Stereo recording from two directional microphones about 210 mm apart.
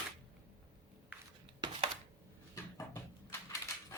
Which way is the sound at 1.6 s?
20° right (ahead or behind).